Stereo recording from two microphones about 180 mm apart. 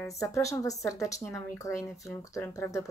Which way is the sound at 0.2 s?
15° left (ahead or behind).